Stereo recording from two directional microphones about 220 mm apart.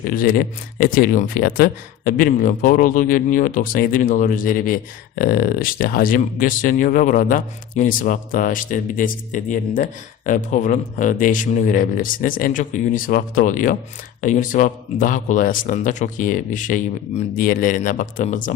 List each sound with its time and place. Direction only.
0.1 s speech: 40° left (ahead or behind)